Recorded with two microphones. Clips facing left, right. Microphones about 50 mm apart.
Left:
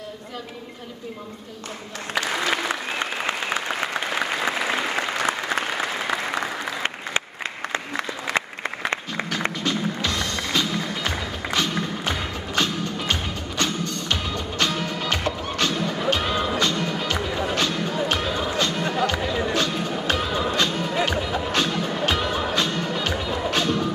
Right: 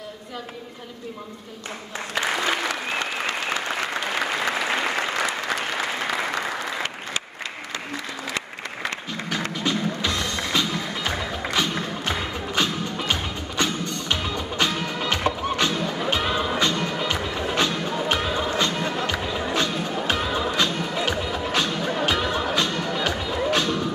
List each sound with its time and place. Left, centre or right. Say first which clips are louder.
2.7 s applause: even; left
4.1 s applause: right 1 dB; centre
5.8 s applause: even; centre
9.7 s music: right 3 dB; centre
20.9 s music: left 2 dB; centre